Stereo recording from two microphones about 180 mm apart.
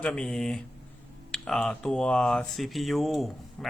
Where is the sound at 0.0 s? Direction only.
5° left (ahead or behind).